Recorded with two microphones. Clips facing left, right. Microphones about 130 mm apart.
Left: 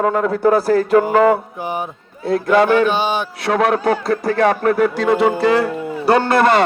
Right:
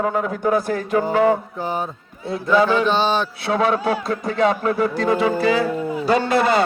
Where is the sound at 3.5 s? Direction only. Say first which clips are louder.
Left 3 dB; 60° left (ahead or behind); by 6.6 s 75° left (ahead or behind).